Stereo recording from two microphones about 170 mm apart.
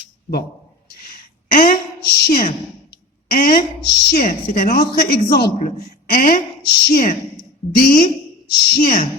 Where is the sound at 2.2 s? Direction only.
60° left (ahead or behind).